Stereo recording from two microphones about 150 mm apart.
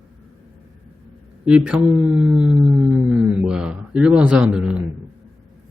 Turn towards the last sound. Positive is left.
turn(degrees=-5)  # may be behind; listen again after turning